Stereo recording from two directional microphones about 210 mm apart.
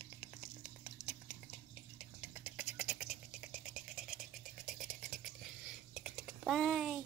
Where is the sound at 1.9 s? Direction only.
5° right (ahead or behind).